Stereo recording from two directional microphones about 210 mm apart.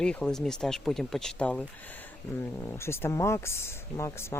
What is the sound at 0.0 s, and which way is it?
Speech, 5° left (ahead or behind).